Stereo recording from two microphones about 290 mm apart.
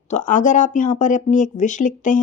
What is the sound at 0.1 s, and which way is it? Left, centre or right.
Speech, left.